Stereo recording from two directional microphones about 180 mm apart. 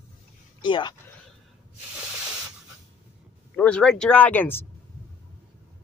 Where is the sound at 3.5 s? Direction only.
5° left (ahead or behind).